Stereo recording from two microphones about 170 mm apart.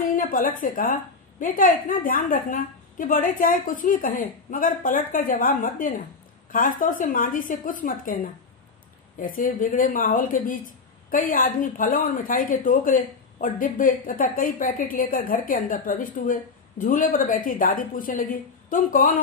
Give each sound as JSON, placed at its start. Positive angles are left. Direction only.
{"t": 0.1, "sound": "a woman's voice", "side_deg": 55}